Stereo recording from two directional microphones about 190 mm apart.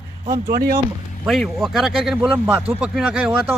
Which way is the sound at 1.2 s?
Centre (ahead or behind).